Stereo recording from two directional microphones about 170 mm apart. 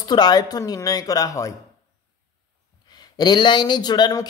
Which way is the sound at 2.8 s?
25° left (ahead or behind).